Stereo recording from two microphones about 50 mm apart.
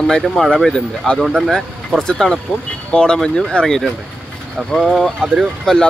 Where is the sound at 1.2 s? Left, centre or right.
Centre.